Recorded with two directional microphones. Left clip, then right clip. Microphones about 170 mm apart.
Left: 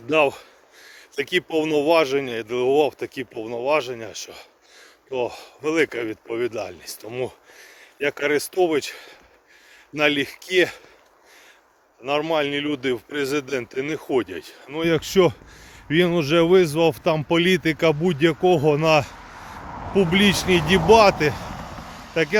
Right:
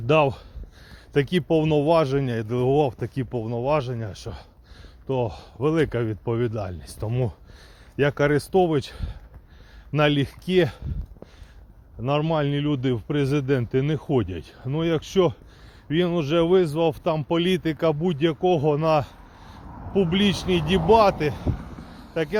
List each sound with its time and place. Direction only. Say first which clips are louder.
0.1 s speech: left 1 dB; 15° left (ahead or behind)
12.0 s speech: left 2 dB; 5° left (ahead or behind)
19.6 s a sound: left 8 dB; 10° right (ahead or behind)
19.9 s speech: left 4 dB; 10° left (ahead or behind)
21.3 s a sound: left 1 dB; 45° left (ahead or behind)
22.1 s speech: left 4 dB; 10° left (ahead or behind)